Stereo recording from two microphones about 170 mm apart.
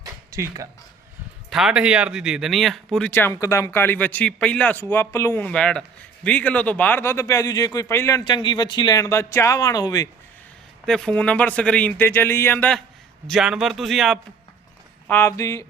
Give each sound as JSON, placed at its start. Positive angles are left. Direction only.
{"t": 0.0, "sound": "a sound", "side_deg": -20}
{"t": 1.5, "sound": "speech", "side_deg": -5}
{"t": 10.8, "sound": "speech", "side_deg": 5}
{"t": 13.2, "sound": "a man's voice", "side_deg": 0}
{"t": 15.0, "sound": "speech", "side_deg": 10}